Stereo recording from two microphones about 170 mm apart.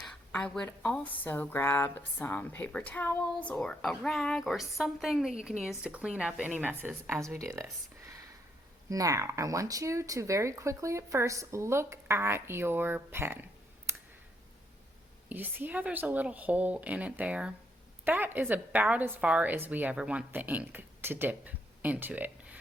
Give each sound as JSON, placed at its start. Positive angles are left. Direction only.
{"t": 0.0, "sound": "speech", "side_deg": 5}
{"t": 8.9, "sound": "speech", "side_deg": -20}
{"t": 13.9, "sound": "clicking", "side_deg": -15}
{"t": 15.3, "sound": "speech", "side_deg": -10}